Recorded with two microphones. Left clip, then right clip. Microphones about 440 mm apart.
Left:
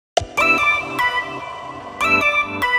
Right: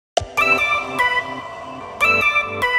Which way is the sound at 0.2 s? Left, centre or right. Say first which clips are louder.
Left 1 dB; centre.